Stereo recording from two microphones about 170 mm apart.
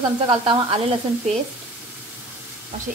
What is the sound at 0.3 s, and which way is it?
Speech, 30° right (ahead or behind).